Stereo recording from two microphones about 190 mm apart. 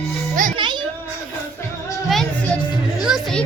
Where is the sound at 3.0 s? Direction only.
Centre (ahead or behind).